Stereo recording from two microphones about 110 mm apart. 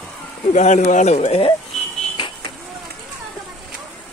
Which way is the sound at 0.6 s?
90° left.